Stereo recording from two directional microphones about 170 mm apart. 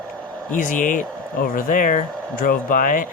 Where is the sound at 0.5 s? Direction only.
50° left (ahead or behind).